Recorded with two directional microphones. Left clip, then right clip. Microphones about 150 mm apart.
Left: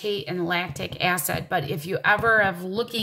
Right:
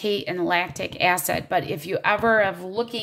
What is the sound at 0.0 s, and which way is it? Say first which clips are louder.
A woman's voice: right 3 dB; 45° right (ahead or behind).